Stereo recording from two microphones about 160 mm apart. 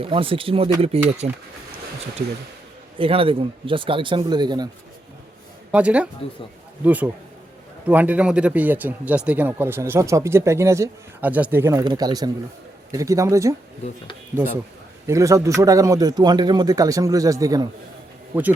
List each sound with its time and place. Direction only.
0.0 s a man's voice: 35° right (ahead or behind)
3.0 s a man's voice: 35° right (ahead or behind)
5.7 s a man's voice: 10° right (ahead or behind)
15.0 s a man's voice: 20° right (ahead or behind)
18.3 s speech: 10° right (ahead or behind)